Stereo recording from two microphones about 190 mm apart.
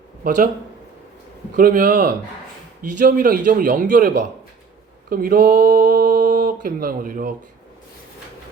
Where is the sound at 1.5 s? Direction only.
45° right (ahead or behind).